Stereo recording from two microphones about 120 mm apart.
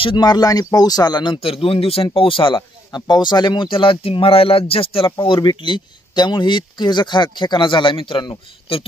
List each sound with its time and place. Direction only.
0.0 s speech: 40° left (ahead or behind)
5.2 s speech: 40° left (ahead or behind)